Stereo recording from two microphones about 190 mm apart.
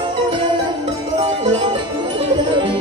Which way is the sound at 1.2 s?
35° right (ahead or behind).